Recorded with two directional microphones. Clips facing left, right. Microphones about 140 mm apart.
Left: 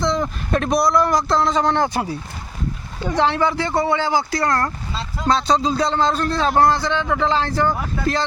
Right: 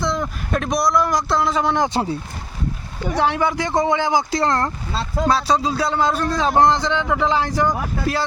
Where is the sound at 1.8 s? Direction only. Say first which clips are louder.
Right 1 dB; 25° right (ahead or behind).